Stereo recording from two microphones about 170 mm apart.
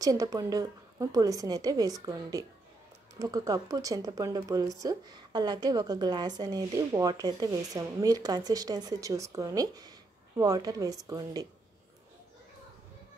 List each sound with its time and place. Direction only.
0.0 s speech: 20° right (ahead or behind)